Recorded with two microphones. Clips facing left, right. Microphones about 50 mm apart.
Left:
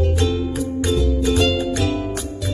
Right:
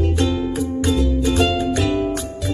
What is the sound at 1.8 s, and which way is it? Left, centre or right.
Music, centre.